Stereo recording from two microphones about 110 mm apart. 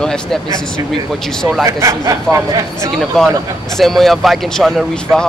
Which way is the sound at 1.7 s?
30° right (ahead or behind).